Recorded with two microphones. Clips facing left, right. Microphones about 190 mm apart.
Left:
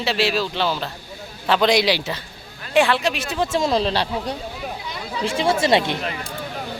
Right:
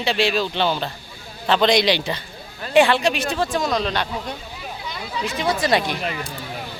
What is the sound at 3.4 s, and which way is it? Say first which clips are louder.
Speech: left 4 dB; 25° left (ahead or behind).